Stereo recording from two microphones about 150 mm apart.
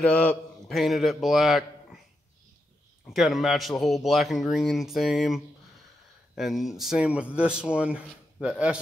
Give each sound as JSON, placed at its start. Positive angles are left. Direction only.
{"t": 0.0, "sound": "a man's voice", "side_deg": 10}
{"t": 3.1, "sound": "speech", "side_deg": 0}